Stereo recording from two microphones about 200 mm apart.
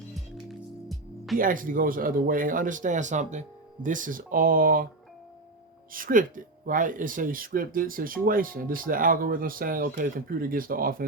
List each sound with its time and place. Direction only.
0.9 s music: centre (ahead or behind)
1.4 s speech: 45° right (ahead or behind)
5.9 s speech: 45° right (ahead or behind)